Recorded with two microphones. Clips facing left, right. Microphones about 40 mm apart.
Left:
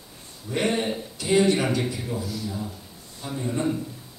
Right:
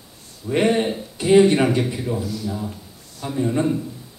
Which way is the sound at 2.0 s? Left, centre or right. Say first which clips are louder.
Right 5 dB; centre.